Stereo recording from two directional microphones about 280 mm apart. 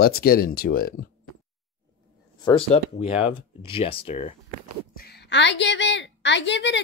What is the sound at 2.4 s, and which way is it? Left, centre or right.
Speech, centre.